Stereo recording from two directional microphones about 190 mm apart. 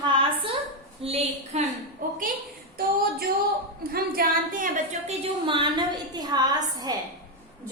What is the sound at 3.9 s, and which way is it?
A woman's voice, 50° right (ahead or behind).